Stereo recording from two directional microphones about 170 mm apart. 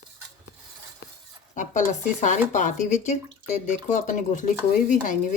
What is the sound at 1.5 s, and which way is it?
Speech, 45° left (ahead or behind).